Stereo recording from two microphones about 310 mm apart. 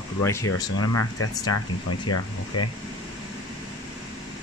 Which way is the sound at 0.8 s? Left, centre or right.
Left.